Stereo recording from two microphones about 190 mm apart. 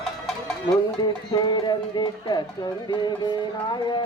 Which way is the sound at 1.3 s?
20° left (ahead or behind).